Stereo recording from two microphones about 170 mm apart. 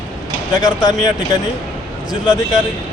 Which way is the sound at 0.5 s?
20° left (ahead or behind).